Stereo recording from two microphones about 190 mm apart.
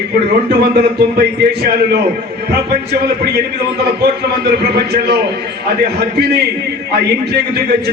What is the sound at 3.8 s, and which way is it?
A man's voice, 55° right (ahead or behind).